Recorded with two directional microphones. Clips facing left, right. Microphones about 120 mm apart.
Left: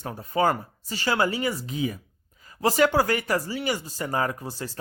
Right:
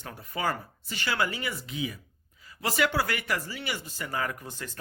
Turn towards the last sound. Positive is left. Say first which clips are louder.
# left 5 dB
turn(degrees=35)  # may be behind; listen again after turning